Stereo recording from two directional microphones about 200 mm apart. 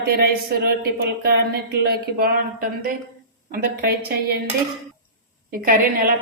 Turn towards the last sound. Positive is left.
turn(degrees=-45)  # may be behind; listen again after turning